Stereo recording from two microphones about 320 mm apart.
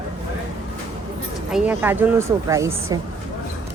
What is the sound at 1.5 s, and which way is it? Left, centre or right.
A woman's voice, centre.